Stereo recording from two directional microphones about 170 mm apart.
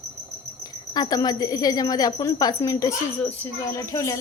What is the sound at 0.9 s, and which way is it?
A woman's voice, 20° left (ahead or behind).